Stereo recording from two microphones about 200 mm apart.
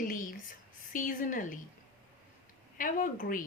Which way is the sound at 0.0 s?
45° left (ahead or behind).